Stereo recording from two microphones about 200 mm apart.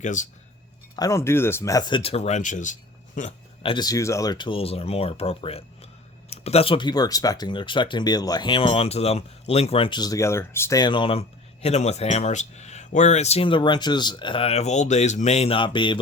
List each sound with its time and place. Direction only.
0.0 s speech: 40° left (ahead or behind)
0.9 s speech: 15° left (ahead or behind)